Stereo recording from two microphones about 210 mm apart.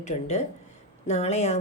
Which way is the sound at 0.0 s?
30° left (ahead or behind).